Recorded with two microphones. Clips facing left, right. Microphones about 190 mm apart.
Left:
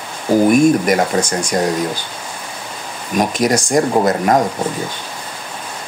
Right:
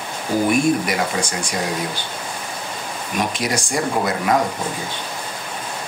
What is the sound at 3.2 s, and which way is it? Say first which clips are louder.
Speech: left 7 dB; 45° left (ahead or behind).